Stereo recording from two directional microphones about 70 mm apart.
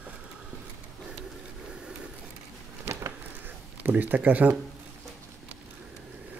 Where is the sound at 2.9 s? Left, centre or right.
Right.